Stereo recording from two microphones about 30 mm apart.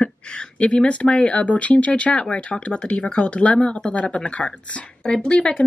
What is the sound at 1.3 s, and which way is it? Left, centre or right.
Speech, left.